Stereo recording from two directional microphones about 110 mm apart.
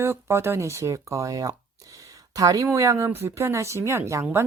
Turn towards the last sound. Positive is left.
turn(degrees=-25)  # may be behind; listen again after turning